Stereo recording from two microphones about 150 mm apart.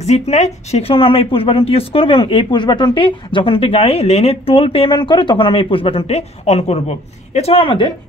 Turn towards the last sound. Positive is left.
turn(degrees=35)  # may be behind; listen again after turning